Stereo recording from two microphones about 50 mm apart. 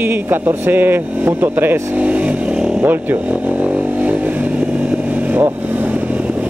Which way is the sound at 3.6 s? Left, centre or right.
Right.